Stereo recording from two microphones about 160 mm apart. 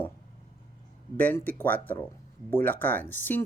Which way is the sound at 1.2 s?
10° left (ahead or behind).